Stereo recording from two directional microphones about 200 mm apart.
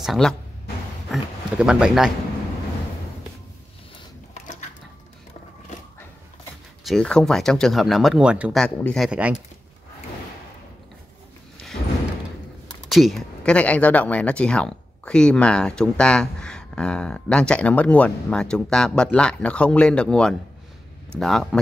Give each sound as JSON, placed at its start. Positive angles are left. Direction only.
{"t": 0.0, "sound": "speech", "side_deg": 0}
{"t": 4.3, "sound": "a sound", "side_deg": 35}
{"t": 6.8, "sound": "speech", "side_deg": 0}
{"t": 12.9, "sound": "speech", "side_deg": 0}